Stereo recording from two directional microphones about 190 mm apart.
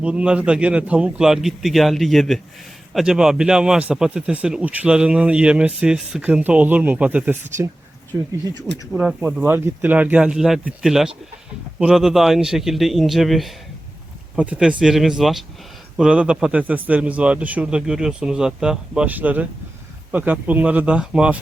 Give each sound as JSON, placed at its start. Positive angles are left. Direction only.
{"t": 0.0, "sound": "a man's voice", "side_deg": -5}
{"t": 8.9, "sound": "a man's voice", "side_deg": -5}